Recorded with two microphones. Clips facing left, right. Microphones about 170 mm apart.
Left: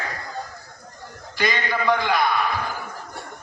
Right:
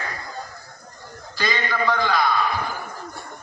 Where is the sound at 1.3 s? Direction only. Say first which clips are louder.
Left 1 dB; 20° left (ahead or behind).